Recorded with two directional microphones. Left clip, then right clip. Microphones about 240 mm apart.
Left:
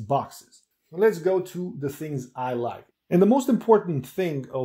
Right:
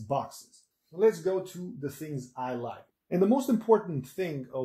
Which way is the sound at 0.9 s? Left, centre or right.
Left.